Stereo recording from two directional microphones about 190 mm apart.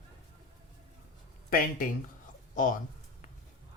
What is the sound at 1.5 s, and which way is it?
Speech, 45° left (ahead or behind).